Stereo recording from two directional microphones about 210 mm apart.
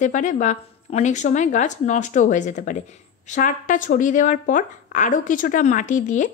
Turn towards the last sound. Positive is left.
turn(degrees=35)  # may be behind; listen again after turning